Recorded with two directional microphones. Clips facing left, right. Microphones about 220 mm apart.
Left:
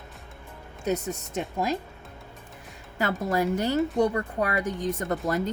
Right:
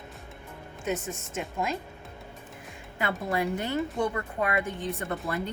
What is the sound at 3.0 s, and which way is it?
A woman's voice, 40° left (ahead or behind).